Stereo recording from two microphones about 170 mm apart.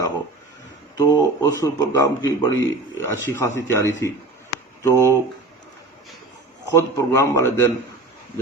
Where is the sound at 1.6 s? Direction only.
20° left (ahead or behind).